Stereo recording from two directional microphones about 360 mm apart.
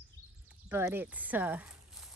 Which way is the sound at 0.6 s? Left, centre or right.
Centre.